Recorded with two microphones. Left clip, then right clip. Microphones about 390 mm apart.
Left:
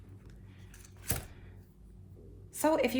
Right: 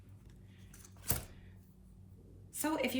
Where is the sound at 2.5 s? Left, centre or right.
Centre.